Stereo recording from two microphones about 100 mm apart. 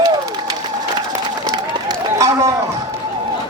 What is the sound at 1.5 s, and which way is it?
Run, 35° right (ahead or behind).